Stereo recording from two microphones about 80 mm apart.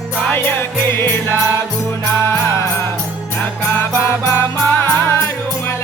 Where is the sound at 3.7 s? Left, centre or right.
Left.